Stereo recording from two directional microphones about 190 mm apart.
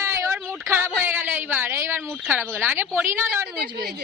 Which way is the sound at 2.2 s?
10° right (ahead or behind).